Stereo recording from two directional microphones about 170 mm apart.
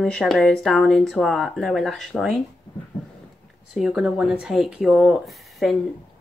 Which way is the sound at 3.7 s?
Centre (ahead or behind).